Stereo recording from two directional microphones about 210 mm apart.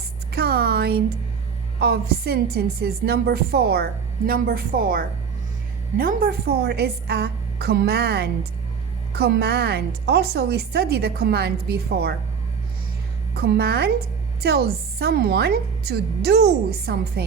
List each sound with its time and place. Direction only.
0.3 s a sound: 50° right (ahead or behind)
1.8 s a woman's voice: 50° right (ahead or behind)
13.3 s a woman's voice: 50° right (ahead or behind)